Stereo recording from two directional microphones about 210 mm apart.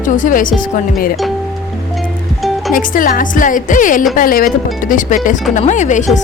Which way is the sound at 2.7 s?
40° left (ahead or behind).